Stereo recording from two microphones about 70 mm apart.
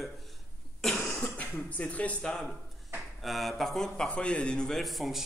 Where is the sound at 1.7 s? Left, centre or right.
Left.